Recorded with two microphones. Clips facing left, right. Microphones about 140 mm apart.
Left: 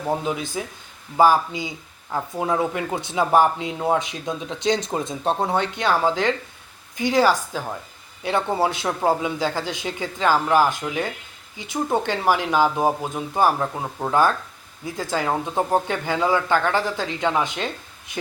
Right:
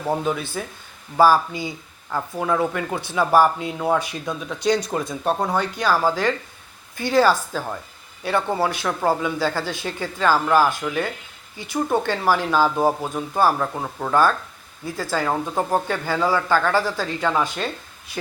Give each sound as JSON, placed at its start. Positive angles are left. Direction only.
{"t": 0.3, "sound": "speech", "side_deg": 15}